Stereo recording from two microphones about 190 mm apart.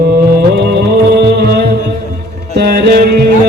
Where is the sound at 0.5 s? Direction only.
60° right (ahead or behind).